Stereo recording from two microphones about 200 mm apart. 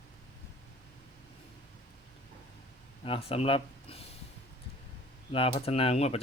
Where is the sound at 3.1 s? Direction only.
30° left (ahead or behind).